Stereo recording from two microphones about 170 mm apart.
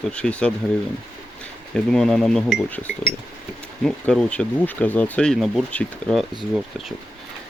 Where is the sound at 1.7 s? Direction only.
5° left (ahead or behind).